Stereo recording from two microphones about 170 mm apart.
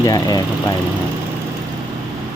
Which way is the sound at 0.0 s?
20° left (ahead or behind).